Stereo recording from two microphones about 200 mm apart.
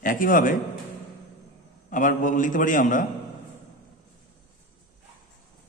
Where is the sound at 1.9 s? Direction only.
40° left (ahead or behind).